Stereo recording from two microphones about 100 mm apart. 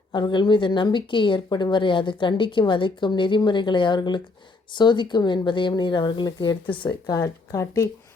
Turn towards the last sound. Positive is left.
turn(degrees=30)  # may be behind; listen again after turning